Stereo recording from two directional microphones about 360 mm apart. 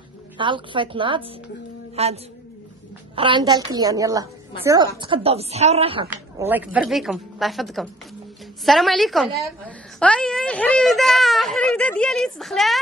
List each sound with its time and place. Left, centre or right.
0.4 s a woman's voice: centre
3.2 s a woman's voice: centre